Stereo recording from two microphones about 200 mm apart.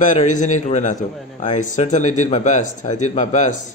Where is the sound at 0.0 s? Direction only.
40° left (ahead or behind).